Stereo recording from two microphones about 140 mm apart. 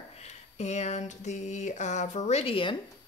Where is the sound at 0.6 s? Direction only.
50° left (ahead or behind).